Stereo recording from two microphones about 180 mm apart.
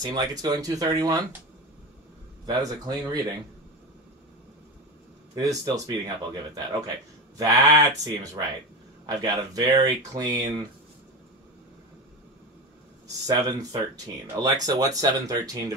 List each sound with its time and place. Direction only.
0.0 s speech: 20° right (ahead or behind)
2.4 s speech: 20° right (ahead or behind)
5.3 s speech: 20° right (ahead or behind)
13.3 s speech: 20° right (ahead or behind)